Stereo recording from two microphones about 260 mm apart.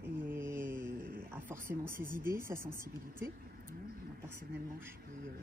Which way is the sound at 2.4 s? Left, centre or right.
Centre.